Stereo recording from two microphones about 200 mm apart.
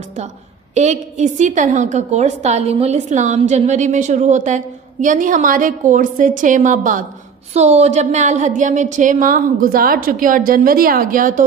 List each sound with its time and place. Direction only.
0.7 s a woman's voice: 35° right (ahead or behind)